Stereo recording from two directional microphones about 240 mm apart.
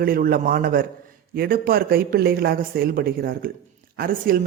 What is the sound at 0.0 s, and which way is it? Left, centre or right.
Speech, right.